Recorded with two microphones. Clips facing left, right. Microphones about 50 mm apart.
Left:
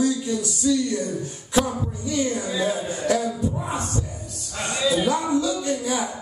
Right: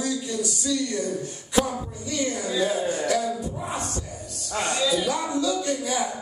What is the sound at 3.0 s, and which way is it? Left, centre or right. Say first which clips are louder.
Speech: left 2 dB; left.